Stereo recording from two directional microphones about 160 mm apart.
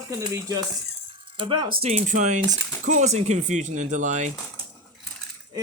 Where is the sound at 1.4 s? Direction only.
30° right (ahead or behind).